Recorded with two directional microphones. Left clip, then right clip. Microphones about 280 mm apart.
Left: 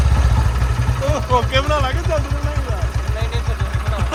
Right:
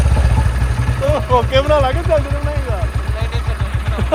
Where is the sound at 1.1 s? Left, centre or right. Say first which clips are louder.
Right 3 dB; centre.